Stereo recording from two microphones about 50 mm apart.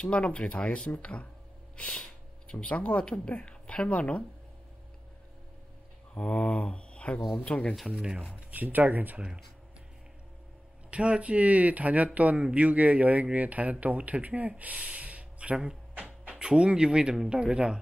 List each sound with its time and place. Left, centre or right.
0.0 s speech: left
6.1 s speech: left
8.5 s speech: right
10.9 s speech: right